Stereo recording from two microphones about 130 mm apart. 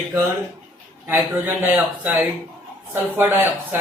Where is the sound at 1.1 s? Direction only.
15° right (ahead or behind).